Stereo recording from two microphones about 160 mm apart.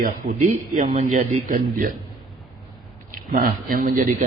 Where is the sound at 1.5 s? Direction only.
55° right (ahead or behind).